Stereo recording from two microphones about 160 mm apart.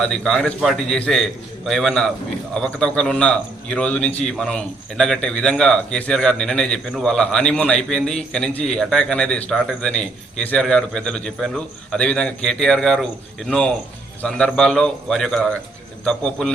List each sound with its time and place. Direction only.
0.0 s a man's voice: 5° left (ahead or behind)